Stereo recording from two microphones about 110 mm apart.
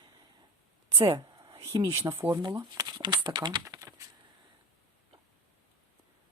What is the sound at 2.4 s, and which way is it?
Speech, 40° right (ahead or behind).